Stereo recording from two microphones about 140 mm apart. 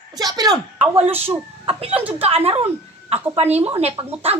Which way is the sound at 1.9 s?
10° right (ahead or behind).